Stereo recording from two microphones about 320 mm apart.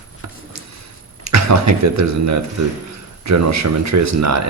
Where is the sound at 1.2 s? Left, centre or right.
Right.